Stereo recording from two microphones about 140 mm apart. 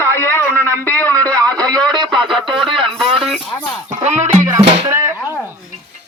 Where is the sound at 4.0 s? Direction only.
55° right (ahead or behind).